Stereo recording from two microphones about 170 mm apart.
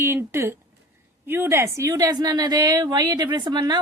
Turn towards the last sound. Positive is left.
turn(degrees=-25)  # may be behind; listen again after turning